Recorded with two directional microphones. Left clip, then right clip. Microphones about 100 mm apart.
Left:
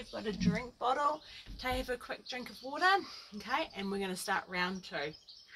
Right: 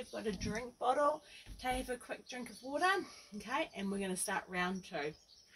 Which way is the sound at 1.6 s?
10° right (ahead or behind).